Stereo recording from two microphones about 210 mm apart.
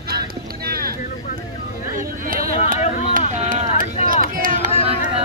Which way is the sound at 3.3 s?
35° right (ahead or behind).